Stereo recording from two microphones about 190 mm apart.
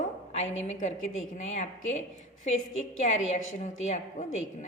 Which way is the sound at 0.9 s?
90° left.